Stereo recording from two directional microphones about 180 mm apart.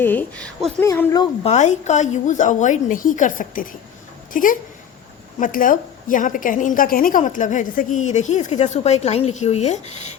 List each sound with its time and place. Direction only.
0.0 s a woman's voice: 10° left (ahead or behind)
0.9 s speech: 20° left (ahead or behind)
1.5 s a woman's voice: 40° left (ahead or behind)